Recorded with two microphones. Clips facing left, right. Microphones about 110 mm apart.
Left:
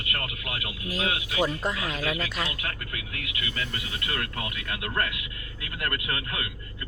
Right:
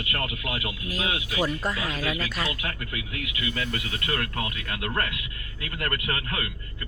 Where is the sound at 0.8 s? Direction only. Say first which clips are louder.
Left 2 dB; 25° left (ahead or behind).